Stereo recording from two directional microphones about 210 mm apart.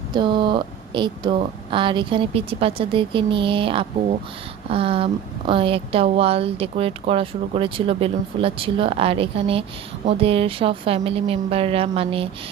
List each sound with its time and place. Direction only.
0.1 s speech: 25° right (ahead or behind)